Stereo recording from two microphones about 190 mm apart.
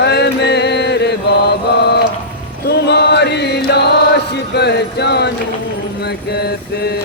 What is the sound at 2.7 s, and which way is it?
Chant, 60° left (ahead or behind).